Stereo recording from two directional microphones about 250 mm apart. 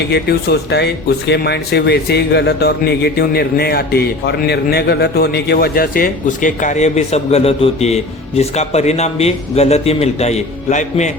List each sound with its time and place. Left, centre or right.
0.1 s a man's voice: left